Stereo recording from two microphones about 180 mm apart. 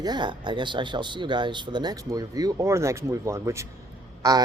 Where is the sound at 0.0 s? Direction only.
25° right (ahead or behind).